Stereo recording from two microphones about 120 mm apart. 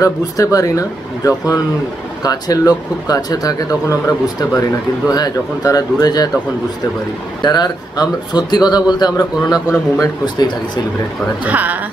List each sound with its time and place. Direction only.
0.0 s speech: 30° left (ahead or behind)
7.4 s speech: 35° left (ahead or behind)
11.4 s speech: 15° right (ahead or behind)